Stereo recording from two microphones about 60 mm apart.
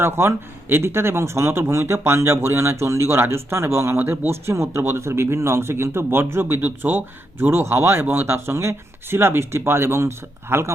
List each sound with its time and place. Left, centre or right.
0.0 s speech: right